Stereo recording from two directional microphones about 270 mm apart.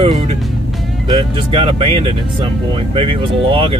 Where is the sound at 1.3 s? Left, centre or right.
Centre.